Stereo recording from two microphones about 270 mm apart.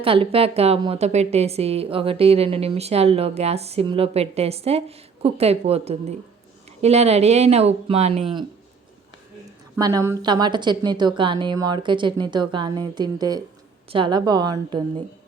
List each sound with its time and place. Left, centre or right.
0.0 s a woman's voice: centre
9.7 s a woman's voice: centre